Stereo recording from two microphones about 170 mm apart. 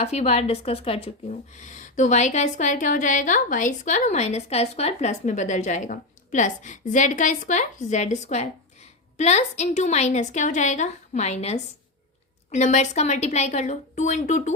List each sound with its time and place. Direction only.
0.0 s speech: 40° left (ahead or behind)